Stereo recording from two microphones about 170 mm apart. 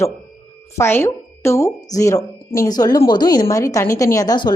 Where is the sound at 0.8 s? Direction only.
15° left (ahead or behind).